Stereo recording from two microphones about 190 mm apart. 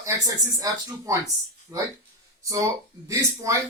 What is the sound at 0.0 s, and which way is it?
Speech, 15° right (ahead or behind).